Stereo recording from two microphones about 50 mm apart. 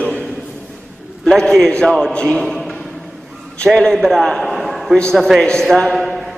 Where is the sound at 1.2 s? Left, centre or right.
Centre.